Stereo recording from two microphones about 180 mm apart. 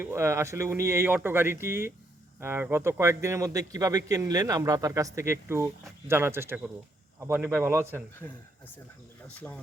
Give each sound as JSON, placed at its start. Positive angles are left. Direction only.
{"t": 0.0, "sound": "speech", "side_deg": -15}
{"t": 9.2, "sound": "speech", "side_deg": 10}